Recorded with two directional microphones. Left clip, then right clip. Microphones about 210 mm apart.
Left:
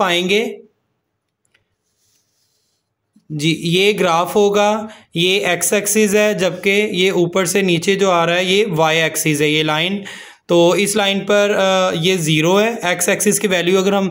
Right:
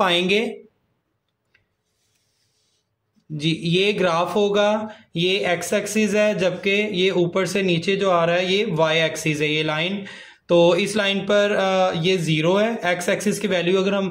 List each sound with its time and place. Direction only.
0.0 s speech: 20° left (ahead or behind)
3.3 s speech: 30° left (ahead or behind)